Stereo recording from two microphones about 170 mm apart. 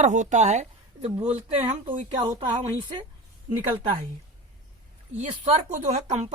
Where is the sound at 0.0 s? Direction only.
45° right (ahead or behind).